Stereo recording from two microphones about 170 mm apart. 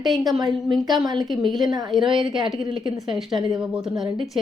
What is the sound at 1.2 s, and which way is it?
A woman's voice, centre (ahead or behind).